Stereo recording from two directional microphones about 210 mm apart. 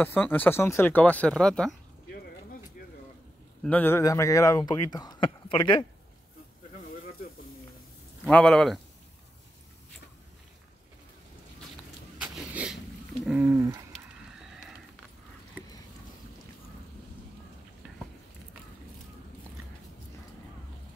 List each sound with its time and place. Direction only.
0.0 s speech: 10° left (ahead or behind)
3.6 s speech: 10° left (ahead or behind)
8.3 s speech: 5° left (ahead or behind)
12.2 s a sound: 5° right (ahead or behind)
13.2 s speech: 10° right (ahead or behind)